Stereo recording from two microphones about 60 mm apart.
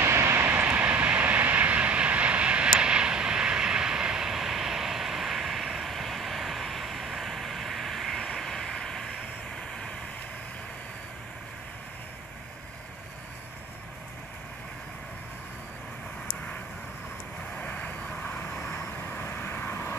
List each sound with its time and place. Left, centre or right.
0.0 s vehicle: right
0.7 s vehicle: right; by 9.1 s centre
17.6 s vehicle: left